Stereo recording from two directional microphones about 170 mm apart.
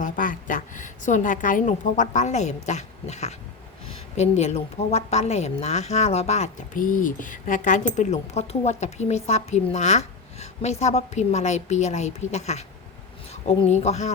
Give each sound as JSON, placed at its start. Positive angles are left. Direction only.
{"t": 0.0, "sound": "a woman's voice", "side_deg": 50}